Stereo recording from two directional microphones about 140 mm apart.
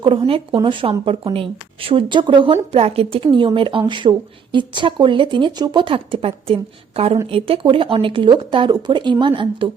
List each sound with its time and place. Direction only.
0.0 s a woman's voice: 40° right (ahead or behind)